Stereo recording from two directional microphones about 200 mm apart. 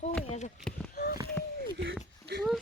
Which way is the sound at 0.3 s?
35° left (ahead or behind).